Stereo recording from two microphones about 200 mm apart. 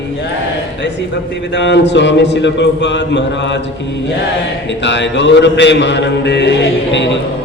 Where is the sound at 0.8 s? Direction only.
60° left (ahead or behind).